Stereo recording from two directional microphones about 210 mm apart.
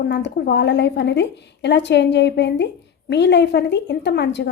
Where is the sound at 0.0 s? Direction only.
55° left (ahead or behind).